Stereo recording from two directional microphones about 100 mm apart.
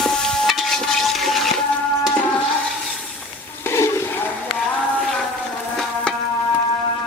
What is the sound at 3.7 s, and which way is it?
Toilet flush, 30° left (ahead or behind).